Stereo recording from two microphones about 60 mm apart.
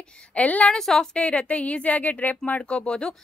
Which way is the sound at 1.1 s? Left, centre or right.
Left.